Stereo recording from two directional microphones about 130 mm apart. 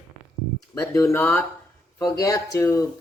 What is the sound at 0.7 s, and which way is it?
Speech, 20° left (ahead or behind).